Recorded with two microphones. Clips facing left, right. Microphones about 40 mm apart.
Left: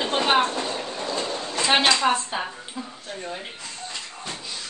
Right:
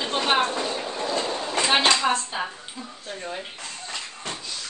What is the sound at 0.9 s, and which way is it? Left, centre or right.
Train, centre.